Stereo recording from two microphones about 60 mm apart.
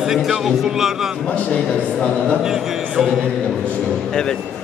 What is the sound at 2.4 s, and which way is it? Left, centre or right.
Speech, centre.